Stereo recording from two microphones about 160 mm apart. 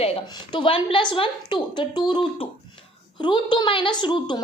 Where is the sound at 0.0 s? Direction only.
35° left (ahead or behind).